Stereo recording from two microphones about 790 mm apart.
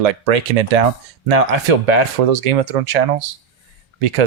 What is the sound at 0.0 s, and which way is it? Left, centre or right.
Speech, right.